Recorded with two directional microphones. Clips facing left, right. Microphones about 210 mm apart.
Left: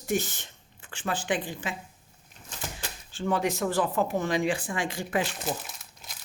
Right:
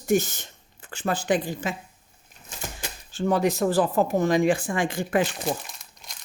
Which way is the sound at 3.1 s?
40° right (ahead or behind).